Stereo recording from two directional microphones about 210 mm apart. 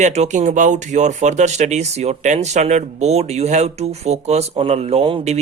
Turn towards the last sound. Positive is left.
turn(degrees=-30)  # may be behind; listen again after turning